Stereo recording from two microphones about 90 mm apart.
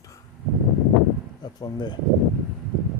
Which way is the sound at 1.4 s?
50° left (ahead or behind).